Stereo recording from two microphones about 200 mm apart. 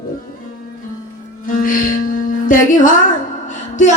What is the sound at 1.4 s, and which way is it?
Music, 45° left (ahead or behind).